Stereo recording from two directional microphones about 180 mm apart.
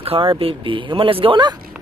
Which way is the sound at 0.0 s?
30° right (ahead or behind).